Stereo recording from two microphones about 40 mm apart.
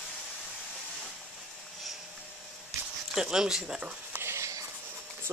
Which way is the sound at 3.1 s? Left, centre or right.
Centre.